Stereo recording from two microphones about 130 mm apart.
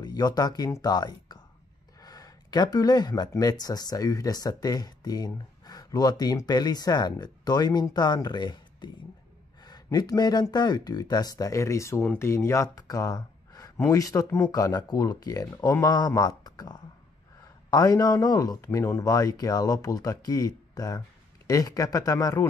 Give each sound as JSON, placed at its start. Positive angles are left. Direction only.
{"t": 0.0, "sound": "a man's voice", "side_deg": 30}